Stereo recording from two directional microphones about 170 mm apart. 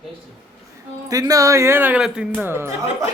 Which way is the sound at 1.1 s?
20° right (ahead or behind).